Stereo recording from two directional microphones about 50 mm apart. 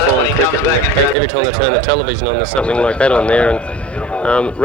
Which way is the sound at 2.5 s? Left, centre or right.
Left.